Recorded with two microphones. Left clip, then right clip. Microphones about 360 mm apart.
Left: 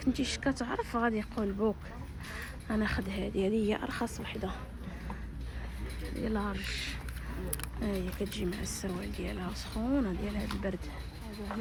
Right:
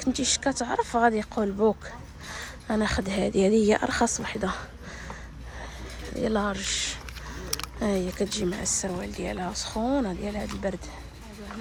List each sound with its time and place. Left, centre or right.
0.1 s a woman's voice: centre
6.2 s speech: centre
7.5 s a sound: centre
8.3 s speech: centre